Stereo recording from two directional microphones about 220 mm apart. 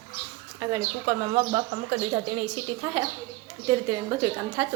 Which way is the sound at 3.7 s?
15° right (ahead or behind).